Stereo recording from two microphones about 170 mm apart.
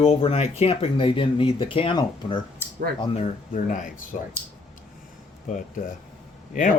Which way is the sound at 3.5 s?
50° left (ahead or behind).